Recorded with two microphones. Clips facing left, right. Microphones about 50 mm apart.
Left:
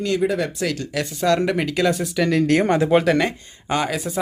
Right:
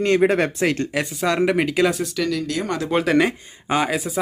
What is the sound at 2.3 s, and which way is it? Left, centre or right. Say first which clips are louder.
Speech: left 7 dB; left.